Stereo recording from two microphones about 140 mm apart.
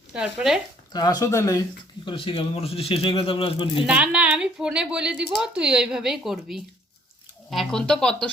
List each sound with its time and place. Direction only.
0.1 s a woman's voice: 5° right (ahead or behind)
0.9 s speech: 25° left (ahead or behind)
2.0 s speech: 40° left (ahead or behind)
3.8 s a woman's voice: 5° right (ahead or behind)